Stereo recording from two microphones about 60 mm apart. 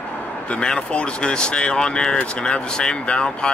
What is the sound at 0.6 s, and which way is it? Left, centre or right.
Speech, centre.